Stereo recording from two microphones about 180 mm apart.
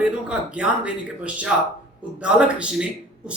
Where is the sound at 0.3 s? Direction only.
5° right (ahead or behind).